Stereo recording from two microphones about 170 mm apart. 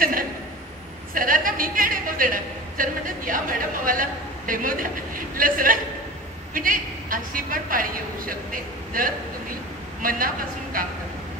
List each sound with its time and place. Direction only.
1.1 s a woman's voice: 55° right (ahead or behind)